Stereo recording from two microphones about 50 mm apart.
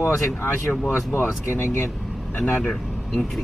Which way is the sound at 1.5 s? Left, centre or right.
Left.